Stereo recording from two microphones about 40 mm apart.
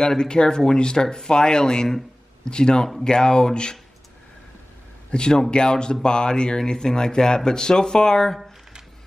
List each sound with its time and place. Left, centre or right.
0.0 s speech: centre
5.1 s speech: left